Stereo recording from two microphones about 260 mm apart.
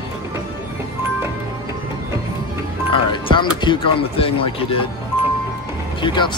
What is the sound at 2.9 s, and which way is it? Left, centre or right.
Speech, centre.